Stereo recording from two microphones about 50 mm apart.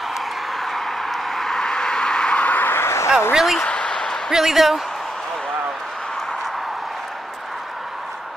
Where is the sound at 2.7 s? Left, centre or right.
Left.